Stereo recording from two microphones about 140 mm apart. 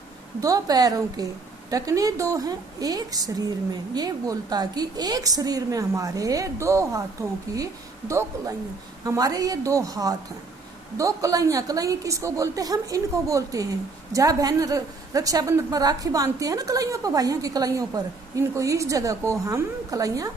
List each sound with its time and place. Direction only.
0.3 s a woman's voice: 25° right (ahead or behind)